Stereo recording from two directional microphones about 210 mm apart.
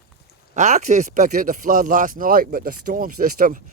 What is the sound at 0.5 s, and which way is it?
Speech, 35° right (ahead or behind).